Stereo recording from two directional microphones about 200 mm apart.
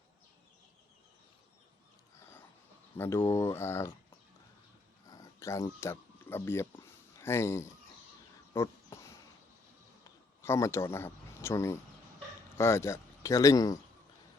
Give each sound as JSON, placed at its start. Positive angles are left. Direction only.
{"t": 3.0, "sound": "speech", "side_deg": 10}
{"t": 5.0, "sound": "a sound", "side_deg": 15}
{"t": 10.0, "sound": "speech", "side_deg": 15}